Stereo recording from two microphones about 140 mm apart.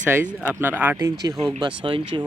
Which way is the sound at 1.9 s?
35° right (ahead or behind).